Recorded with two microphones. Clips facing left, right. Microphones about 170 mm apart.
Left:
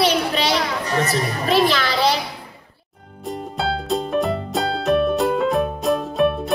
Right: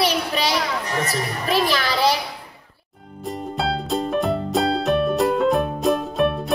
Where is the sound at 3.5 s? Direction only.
Centre (ahead or behind).